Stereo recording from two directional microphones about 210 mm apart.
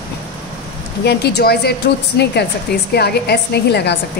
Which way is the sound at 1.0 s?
50° left (ahead or behind).